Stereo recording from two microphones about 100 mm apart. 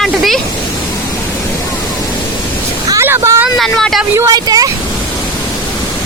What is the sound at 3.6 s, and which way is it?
Speech, centre (ahead or behind).